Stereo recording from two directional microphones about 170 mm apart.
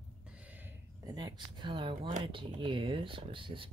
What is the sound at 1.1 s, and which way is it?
Speech, 25° right (ahead or behind).